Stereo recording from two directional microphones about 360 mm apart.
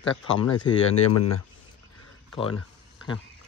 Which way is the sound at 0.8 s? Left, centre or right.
Left.